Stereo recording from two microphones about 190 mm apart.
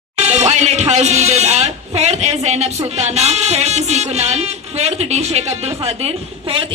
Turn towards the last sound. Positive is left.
turn(degrees=-30)  # may be behind; listen again after turning